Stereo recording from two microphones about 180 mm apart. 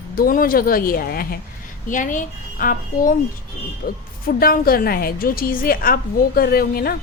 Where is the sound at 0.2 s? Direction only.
55° left (ahead or behind).